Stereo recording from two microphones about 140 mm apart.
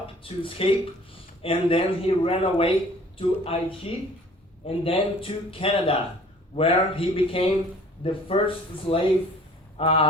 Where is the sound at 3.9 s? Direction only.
45° left (ahead or behind).